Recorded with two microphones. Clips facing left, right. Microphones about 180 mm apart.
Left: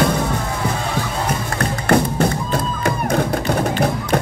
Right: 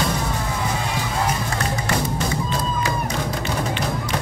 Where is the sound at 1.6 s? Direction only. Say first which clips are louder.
Left 7 dB; 55° left (ahead or behind).